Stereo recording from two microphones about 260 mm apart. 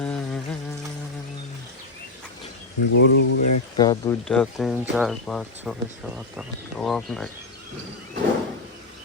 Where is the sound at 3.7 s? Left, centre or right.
Centre.